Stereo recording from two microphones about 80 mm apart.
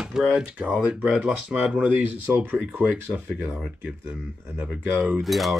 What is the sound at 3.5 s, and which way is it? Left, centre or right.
Speech, centre.